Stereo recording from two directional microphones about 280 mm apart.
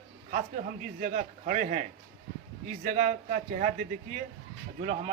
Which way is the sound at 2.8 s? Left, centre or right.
Right.